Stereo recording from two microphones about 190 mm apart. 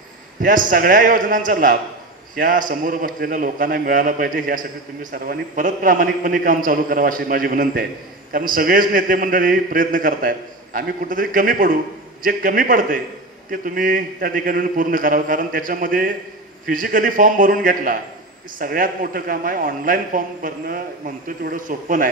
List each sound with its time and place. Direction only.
0.4 s a man's voice: 45° right (ahead or behind)
18.6 s a man's voice: 50° right (ahead or behind)